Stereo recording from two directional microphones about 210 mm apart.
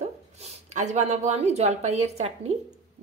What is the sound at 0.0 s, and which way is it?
Speech, 35° right (ahead or behind).